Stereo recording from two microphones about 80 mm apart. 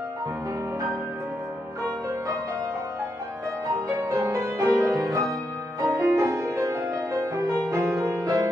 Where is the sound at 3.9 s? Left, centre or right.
Right.